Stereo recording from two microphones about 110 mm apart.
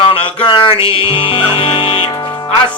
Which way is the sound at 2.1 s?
40° left (ahead or behind).